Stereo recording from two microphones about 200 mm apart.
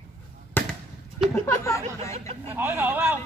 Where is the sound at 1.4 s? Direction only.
15° left (ahead or behind).